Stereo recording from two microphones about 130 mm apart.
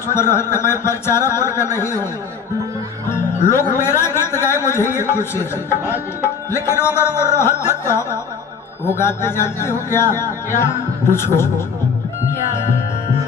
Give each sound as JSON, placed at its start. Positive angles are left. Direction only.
{"t": 0.1, "sound": "speech", "side_deg": 20}
{"t": 3.5, "sound": "speech", "side_deg": 20}